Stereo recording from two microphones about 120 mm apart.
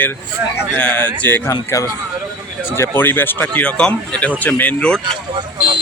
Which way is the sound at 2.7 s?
20° left (ahead or behind).